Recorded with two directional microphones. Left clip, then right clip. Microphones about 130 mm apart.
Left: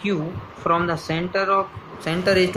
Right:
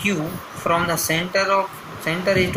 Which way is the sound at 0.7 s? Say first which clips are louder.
Right 1 dB; 50° left (ahead or behind).